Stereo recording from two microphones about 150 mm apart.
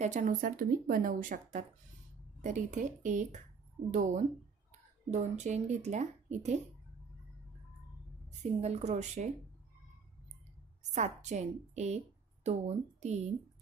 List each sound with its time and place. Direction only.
0.0 s speech: 55° right (ahead or behind)
8.4 s speech: 45° right (ahead or behind)
11.0 s speech: 50° right (ahead or behind)